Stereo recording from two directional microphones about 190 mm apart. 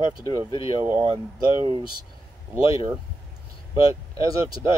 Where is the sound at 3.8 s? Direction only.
30° left (ahead or behind).